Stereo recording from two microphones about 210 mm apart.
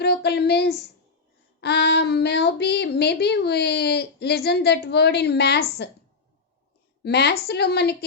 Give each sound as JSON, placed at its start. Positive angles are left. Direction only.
{"t": 0.0, "sound": "speech", "side_deg": 50}
{"t": 7.0, "sound": "speech", "side_deg": 50}